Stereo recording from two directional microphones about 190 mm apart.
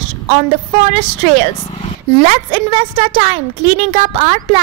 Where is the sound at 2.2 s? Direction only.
30° right (ahead or behind).